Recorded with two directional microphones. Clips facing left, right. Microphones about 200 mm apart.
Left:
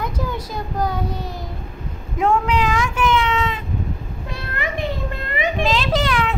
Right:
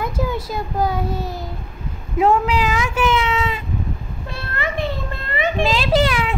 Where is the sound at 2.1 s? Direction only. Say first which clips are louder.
Right 2 dB; 5° right (ahead or behind).